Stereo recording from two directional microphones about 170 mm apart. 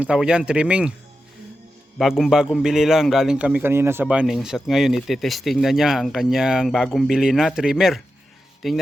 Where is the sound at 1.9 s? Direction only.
Centre (ahead or behind).